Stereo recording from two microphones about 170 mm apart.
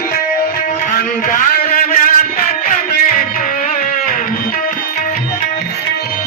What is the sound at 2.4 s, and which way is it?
Music, 50° left (ahead or behind).